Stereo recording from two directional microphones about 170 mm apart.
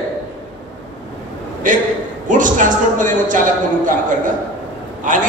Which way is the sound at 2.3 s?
50° right (ahead or behind).